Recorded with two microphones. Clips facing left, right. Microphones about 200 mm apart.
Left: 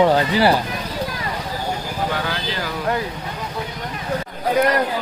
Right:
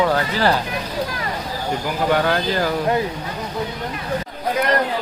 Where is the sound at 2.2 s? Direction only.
50° right (ahead or behind).